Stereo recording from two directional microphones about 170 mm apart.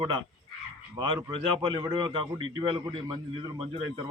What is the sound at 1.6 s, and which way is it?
A man's voice, 25° right (ahead or behind).